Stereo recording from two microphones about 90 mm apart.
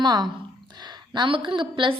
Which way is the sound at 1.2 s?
70° right (ahead or behind).